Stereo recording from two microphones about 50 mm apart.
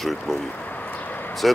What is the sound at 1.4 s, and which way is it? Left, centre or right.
Speech, centre.